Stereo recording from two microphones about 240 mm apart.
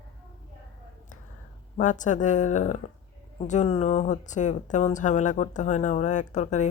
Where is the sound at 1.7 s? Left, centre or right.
Left.